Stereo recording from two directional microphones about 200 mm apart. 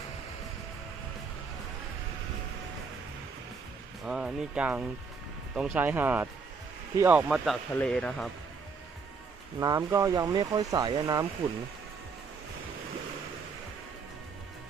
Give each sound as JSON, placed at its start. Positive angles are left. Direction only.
{"t": 4.0, "sound": "speech", "side_deg": -5}
{"t": 9.6, "sound": "speech", "side_deg": -15}